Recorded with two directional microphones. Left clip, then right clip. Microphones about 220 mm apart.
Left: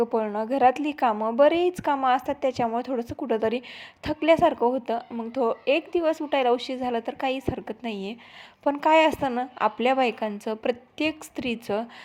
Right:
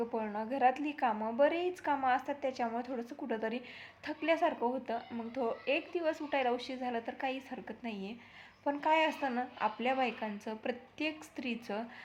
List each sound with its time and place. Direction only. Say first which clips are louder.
0.0 s speech: left 11 dB; 35° left (ahead or behind)